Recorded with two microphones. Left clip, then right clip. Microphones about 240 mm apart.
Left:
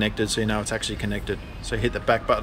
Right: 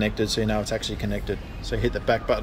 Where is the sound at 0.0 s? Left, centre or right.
Centre.